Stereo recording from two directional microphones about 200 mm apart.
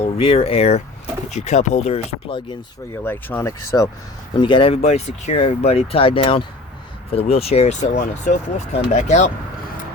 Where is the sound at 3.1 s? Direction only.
10° left (ahead or behind).